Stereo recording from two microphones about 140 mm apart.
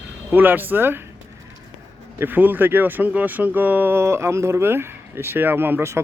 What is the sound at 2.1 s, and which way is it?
Speech, 15° right (ahead or behind).